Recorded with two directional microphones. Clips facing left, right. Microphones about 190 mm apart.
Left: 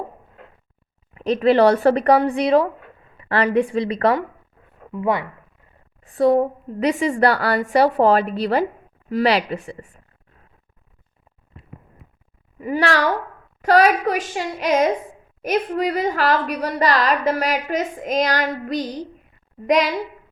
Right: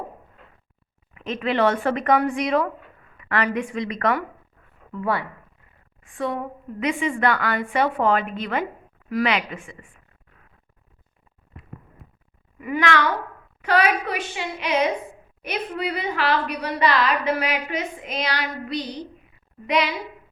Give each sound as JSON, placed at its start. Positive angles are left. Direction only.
{"t": 1.1, "sound": "a woman's voice", "side_deg": 35}
{"t": 4.9, "sound": "speech", "side_deg": 20}
{"t": 6.0, "sound": "a woman's voice", "side_deg": 35}
{"t": 12.5, "sound": "a woman's voice", "side_deg": 35}